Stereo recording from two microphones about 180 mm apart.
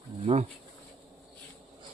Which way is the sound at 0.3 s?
35° right (ahead or behind).